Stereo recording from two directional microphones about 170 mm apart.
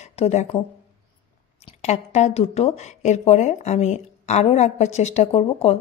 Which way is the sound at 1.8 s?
40° left (ahead or behind).